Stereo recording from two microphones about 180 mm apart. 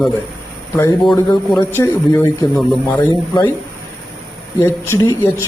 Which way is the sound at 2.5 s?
Centre (ahead or behind).